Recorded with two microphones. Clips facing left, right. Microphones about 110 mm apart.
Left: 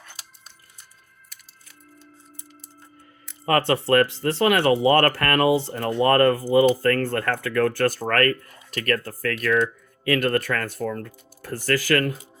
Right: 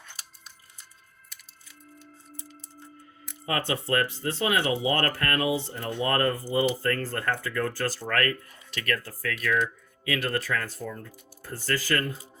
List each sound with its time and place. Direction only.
3.4 s speech: 60° left (ahead or behind)